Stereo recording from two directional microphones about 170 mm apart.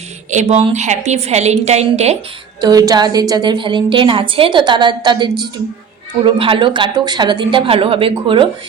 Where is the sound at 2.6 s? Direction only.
20° right (ahead or behind).